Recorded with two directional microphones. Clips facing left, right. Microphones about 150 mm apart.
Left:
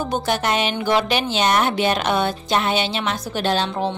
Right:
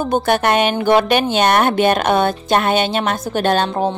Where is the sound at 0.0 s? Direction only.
55° right (ahead or behind).